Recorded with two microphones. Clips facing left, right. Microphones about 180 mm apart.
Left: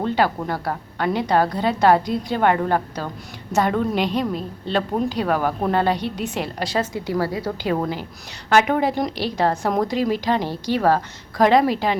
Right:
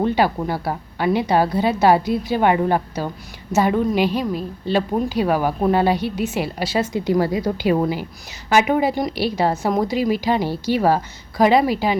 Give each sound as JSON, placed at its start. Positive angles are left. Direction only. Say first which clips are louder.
{"t": 0.0, "sound": "a woman's voice", "louder": "right 2 dB", "side_deg": -10}
{"t": 6.9, "sound": "a woman's voice", "louder": "right 4 dB", "side_deg": -20}